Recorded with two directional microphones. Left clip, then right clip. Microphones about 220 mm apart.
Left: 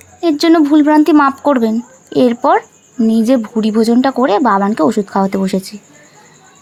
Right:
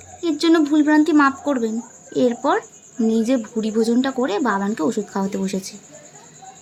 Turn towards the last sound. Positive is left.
turn(degrees=35)  # may be behind; listen again after turning